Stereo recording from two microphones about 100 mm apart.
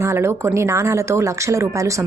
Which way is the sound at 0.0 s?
25° right (ahead or behind).